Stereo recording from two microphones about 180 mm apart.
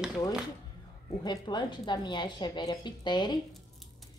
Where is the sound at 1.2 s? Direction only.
25° left (ahead or behind).